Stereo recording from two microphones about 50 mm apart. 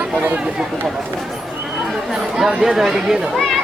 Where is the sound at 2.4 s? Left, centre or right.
Centre.